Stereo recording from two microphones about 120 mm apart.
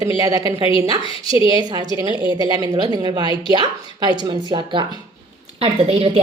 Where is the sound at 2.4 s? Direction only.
35° right (ahead or behind).